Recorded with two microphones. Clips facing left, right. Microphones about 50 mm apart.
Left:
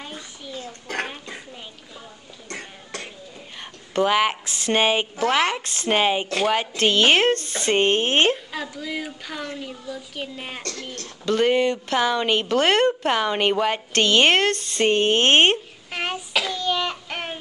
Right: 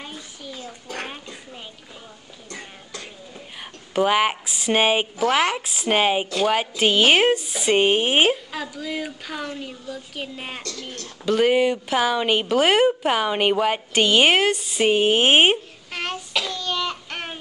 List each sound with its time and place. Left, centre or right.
2.5 s cough: left
3.9 s a woman's voice: centre
10.6 s speech: left
11.2 s a woman's voice: centre
15.9 s child singing: centre